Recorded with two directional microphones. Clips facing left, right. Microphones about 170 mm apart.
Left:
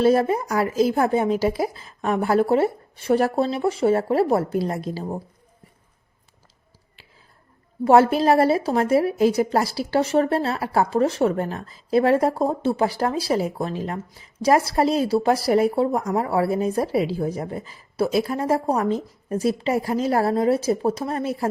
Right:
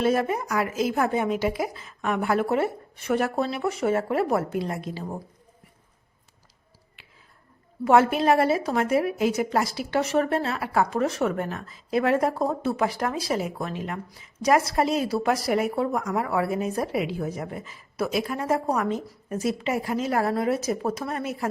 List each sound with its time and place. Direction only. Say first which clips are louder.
0.0 s a woman's voice: left 5 dB; 35° left (ahead or behind)
7.9 s a woman's voice: left 3 dB; 35° left (ahead or behind)